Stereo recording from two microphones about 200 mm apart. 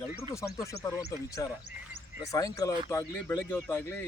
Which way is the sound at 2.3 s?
15° left (ahead or behind).